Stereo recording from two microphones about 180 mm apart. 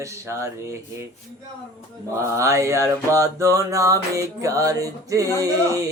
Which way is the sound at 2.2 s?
15° right (ahead or behind).